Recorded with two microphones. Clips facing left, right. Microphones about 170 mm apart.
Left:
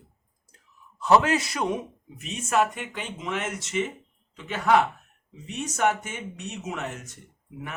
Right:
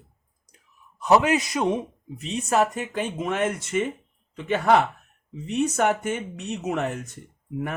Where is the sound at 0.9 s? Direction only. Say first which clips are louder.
Right 1 dB; 15° right (ahead or behind).